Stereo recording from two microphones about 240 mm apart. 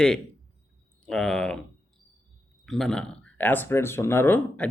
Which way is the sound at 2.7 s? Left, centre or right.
Centre.